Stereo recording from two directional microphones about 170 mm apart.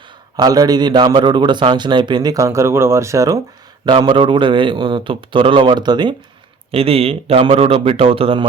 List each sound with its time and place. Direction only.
0.3 s a man's voice: 20° right (ahead or behind)